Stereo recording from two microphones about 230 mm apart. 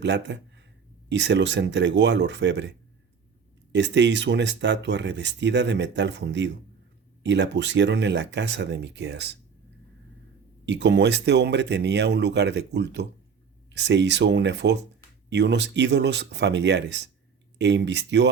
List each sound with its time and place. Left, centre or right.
0.0 s speech: right
10.7 s speech: right